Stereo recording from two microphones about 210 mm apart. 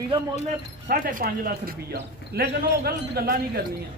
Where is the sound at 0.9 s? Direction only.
40° right (ahead or behind).